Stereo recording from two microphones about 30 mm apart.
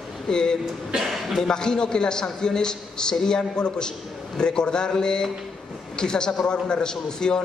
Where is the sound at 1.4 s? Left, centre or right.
Left.